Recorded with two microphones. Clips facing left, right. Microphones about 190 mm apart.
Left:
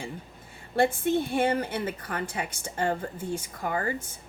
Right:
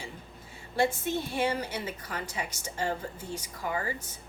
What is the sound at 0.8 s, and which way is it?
A woman's voice, 55° left (ahead or behind).